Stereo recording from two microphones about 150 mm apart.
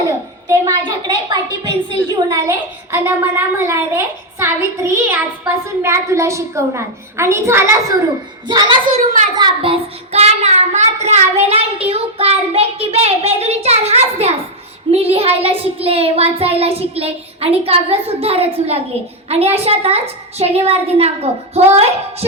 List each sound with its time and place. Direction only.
0.4 s a woman's voice: 20° right (ahead or behind)
2.3 s a child's voice: 15° right (ahead or behind)
8.4 s speech: 30° right (ahead or behind)
8.8 s a child's voice: 60° right (ahead or behind)
9.6 s child singing: 40° right (ahead or behind)